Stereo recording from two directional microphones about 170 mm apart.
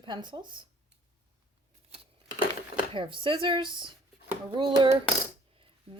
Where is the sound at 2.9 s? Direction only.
30° right (ahead or behind).